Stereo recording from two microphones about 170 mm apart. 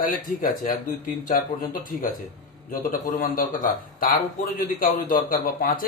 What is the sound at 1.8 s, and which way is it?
A man's voice, 55° left (ahead or behind).